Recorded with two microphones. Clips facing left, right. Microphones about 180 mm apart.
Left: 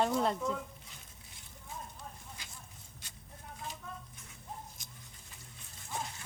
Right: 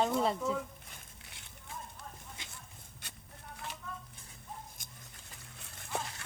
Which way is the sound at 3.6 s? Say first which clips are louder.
Even; 70° right (ahead or behind).